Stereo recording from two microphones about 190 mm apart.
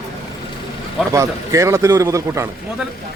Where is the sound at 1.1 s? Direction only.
15° right (ahead or behind).